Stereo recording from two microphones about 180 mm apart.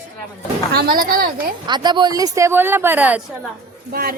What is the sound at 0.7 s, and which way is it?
Speech, 55° right (ahead or behind).